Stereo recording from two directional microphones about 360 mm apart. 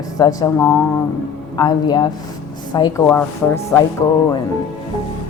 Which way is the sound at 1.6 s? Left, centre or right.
Centre.